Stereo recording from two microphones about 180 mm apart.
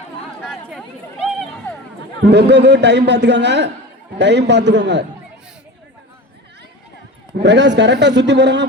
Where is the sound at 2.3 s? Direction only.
70° right (ahead or behind).